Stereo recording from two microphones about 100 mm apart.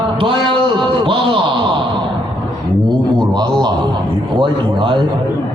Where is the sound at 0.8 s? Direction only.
55° right (ahead or behind).